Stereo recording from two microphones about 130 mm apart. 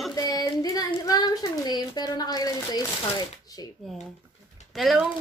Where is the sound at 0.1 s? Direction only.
30° left (ahead or behind).